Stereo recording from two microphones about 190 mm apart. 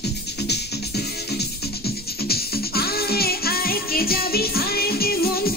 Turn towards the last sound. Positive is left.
turn(degrees=55)  # may be behind; listen again after turning